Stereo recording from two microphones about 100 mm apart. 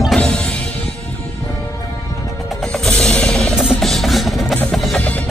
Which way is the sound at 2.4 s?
Centre (ahead or behind).